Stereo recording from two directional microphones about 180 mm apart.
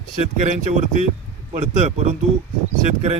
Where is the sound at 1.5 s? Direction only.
35° right (ahead or behind).